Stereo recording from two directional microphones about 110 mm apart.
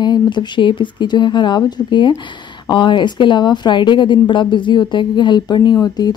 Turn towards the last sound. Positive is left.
turn(degrees=35)  # may be behind; listen again after turning